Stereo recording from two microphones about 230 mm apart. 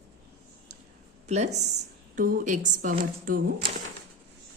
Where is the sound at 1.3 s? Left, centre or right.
Right.